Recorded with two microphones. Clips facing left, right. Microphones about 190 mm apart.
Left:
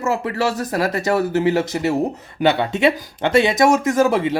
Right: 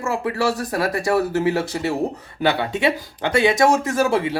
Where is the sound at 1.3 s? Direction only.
20° left (ahead or behind).